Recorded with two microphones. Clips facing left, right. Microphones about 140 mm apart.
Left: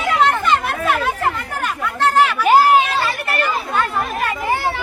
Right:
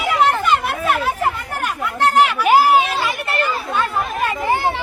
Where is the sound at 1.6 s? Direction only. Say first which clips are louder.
Even; 15° right (ahead or behind).